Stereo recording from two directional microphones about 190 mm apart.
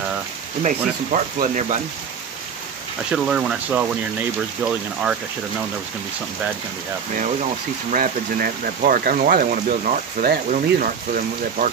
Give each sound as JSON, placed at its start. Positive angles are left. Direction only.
{"t": 0.6, "sound": "speech", "side_deg": -40}
{"t": 3.1, "sound": "speech", "side_deg": -5}
{"t": 7.9, "sound": "speech", "side_deg": -50}